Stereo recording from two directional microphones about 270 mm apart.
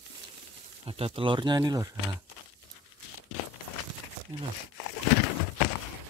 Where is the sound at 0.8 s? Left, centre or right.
Right.